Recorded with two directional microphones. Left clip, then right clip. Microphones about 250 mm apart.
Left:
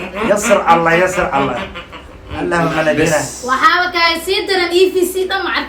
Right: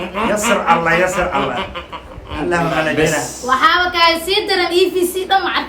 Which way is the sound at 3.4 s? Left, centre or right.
Centre.